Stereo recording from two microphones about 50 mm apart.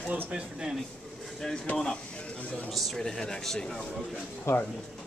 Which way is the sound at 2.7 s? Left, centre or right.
Centre.